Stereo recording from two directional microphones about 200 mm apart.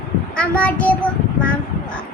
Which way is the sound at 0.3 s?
5° left (ahead or behind).